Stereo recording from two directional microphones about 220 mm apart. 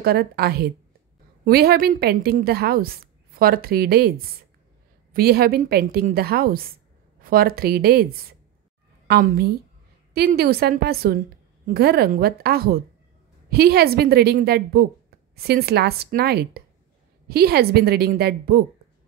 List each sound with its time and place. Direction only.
0.0 s a woman's voice: 45° right (ahead or behind)
5.1 s a woman's voice: 45° right (ahead or behind)